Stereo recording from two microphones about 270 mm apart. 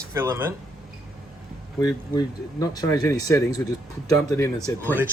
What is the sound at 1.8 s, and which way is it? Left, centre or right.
Speech, centre.